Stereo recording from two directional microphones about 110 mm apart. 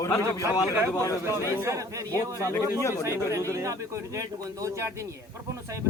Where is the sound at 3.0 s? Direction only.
25° right (ahead or behind).